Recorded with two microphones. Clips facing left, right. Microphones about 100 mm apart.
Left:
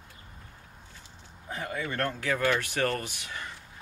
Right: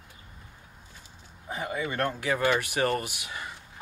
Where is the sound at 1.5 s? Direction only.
15° right (ahead or behind).